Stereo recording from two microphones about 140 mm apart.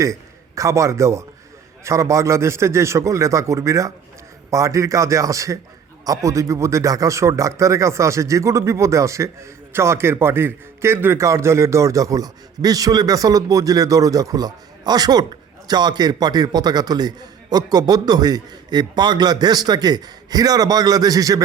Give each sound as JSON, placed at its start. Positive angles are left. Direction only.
{"t": 0.0, "sound": "a man's voice", "side_deg": -20}